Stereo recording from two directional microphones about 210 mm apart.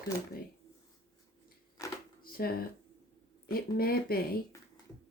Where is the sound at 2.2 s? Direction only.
45° left (ahead or behind).